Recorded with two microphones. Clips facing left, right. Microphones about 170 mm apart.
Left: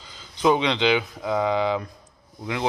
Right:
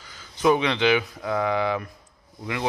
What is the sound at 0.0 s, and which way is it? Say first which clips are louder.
Speech: even; 20° left (ahead or behind).